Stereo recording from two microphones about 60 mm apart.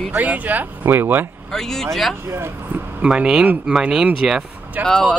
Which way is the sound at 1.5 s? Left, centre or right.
Centre.